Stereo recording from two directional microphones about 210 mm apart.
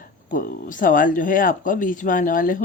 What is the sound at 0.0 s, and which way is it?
Speech, 40° left (ahead or behind).